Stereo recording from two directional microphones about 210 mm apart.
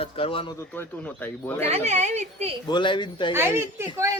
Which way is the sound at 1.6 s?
30° right (ahead or behind).